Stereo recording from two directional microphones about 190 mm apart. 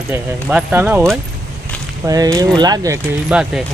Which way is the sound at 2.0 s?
20° right (ahead or behind).